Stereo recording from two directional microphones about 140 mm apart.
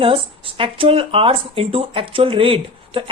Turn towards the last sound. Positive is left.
turn(degrees=-40)  # may be behind; listen again after turning